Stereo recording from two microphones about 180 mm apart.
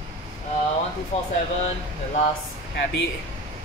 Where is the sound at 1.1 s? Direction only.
35° left (ahead or behind).